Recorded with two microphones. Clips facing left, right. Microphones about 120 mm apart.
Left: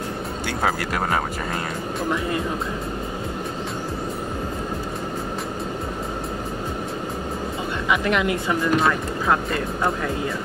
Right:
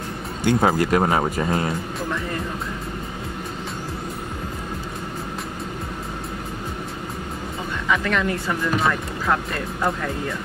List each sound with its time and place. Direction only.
0.5 s speech: 20° right (ahead or behind)
7.9 s a woman's voice: 15° left (ahead or behind)
8.7 s speech: centre (ahead or behind)